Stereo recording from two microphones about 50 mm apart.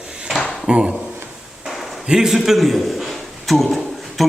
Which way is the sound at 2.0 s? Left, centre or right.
Centre.